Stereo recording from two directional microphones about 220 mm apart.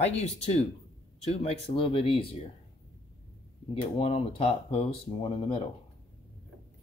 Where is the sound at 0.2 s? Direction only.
30° left (ahead or behind).